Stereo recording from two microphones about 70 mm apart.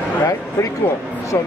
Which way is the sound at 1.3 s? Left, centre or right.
Left.